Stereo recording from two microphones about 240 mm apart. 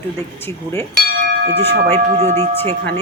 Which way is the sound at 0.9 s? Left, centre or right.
Right.